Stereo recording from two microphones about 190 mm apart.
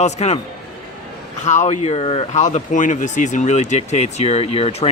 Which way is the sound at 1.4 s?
40° left (ahead or behind).